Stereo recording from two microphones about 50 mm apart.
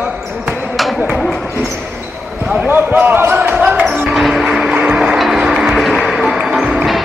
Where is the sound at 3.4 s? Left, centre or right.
Right.